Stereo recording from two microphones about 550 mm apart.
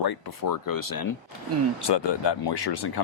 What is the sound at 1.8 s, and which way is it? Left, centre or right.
Speech, left.